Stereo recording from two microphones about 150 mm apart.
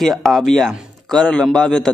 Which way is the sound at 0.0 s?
Centre (ahead or behind).